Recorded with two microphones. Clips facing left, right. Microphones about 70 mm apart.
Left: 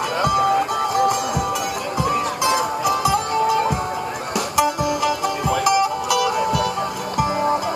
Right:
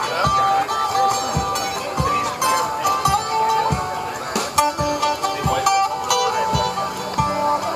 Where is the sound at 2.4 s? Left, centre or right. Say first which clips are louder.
Even; centre.